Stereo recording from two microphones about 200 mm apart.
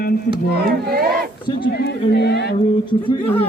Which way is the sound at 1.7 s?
55° left (ahead or behind).